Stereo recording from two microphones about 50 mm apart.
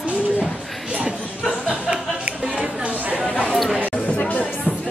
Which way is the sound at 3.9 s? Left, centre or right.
Left.